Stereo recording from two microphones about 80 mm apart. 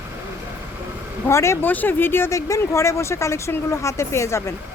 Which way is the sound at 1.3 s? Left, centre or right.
Left.